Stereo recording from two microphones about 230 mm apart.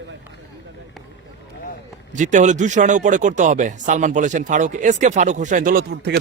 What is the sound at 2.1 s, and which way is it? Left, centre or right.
Speech, right.